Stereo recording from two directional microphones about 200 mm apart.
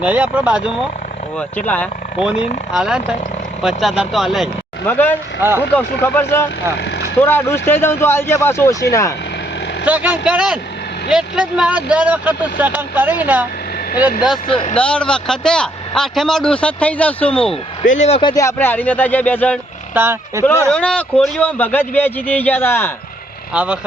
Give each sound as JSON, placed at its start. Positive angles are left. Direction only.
{"t": 0.0, "sound": "speech", "side_deg": -5}
{"t": 1.4, "sound": "speech", "side_deg": 10}
{"t": 2.2, "sound": "speech", "side_deg": -5}
{"t": 4.9, "sound": "speech", "side_deg": 10}
{"t": 5.4, "sound": "speech", "side_deg": -10}
{"t": 6.0, "sound": "speech", "side_deg": 10}
{"t": 9.8, "sound": "speech", "side_deg": -10}
{"t": 14.4, "sound": "speech", "side_deg": 25}
{"t": 14.8, "sound": "speech", "side_deg": 5}
{"t": 17.5, "sound": "speech", "side_deg": 35}
{"t": 18.2, "sound": "speech", "side_deg": 20}
{"t": 19.9, "sound": "speech", "side_deg": -10}
{"t": 20.4, "sound": "speech", "side_deg": 5}